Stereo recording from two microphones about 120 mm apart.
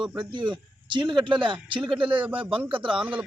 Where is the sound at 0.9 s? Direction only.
40° right (ahead or behind).